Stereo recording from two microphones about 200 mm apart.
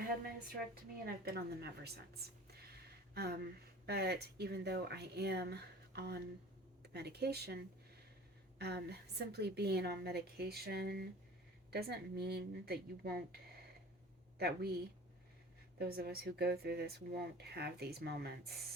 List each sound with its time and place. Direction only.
1.0 s speech: 50° right (ahead or behind)
2.5 s a sound: 50° right (ahead or behind)
3.8 s speech: 55° right (ahead or behind)
15.8 s speech: 50° right (ahead or behind)